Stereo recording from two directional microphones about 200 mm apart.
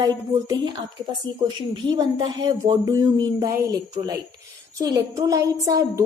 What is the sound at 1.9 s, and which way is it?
A woman's voice, 20° right (ahead or behind).